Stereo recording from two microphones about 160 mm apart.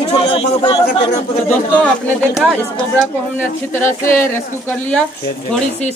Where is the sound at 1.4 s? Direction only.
10° left (ahead or behind).